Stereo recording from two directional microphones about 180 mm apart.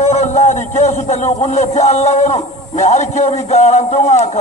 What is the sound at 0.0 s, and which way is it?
A man's voice, 40° left (ahead or behind).